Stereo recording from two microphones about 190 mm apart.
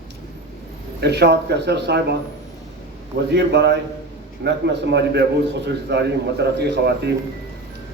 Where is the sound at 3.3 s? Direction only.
65° right (ahead or behind).